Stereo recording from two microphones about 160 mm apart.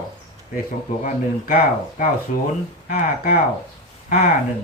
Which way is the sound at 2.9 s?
60° left (ahead or behind).